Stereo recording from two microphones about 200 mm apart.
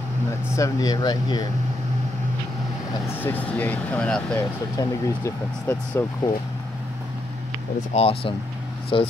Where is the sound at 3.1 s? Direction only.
10° left (ahead or behind).